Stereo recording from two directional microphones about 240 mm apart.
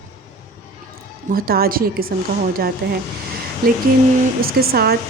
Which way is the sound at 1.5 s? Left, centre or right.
Right.